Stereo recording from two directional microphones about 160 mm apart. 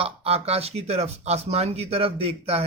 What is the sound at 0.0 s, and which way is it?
Speech, 40° right (ahead or behind).